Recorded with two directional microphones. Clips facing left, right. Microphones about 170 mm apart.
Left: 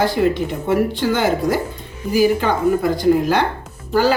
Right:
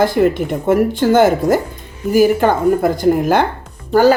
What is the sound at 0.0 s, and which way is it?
Speech, 50° right (ahead or behind).